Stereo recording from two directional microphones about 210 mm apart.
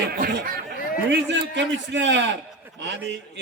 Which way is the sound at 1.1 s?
55° right (ahead or behind).